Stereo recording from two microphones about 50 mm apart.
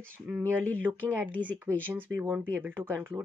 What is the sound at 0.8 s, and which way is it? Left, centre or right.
Speech, right.